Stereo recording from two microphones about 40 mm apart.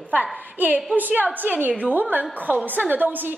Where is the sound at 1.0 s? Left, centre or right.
Right.